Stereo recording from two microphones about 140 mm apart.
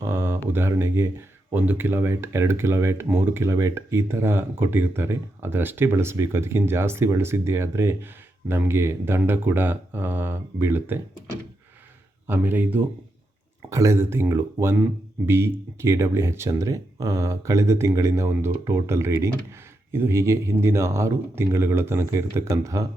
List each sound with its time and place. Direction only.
0.0 s a sound: 20° right (ahead or behind)
0.4 s speech: 15° right (ahead or behind)
12.3 s speech: 15° right (ahead or behind)